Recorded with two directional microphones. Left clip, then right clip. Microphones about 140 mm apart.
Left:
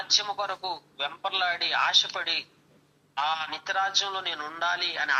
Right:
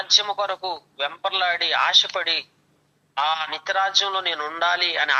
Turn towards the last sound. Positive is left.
turn(degrees=-40)  # may be behind; listen again after turning